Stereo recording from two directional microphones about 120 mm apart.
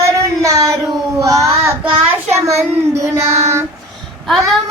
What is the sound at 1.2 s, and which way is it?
Child singing, 30° right (ahead or behind).